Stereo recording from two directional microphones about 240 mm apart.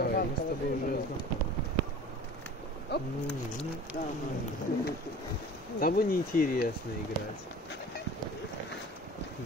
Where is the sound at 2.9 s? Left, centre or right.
Left.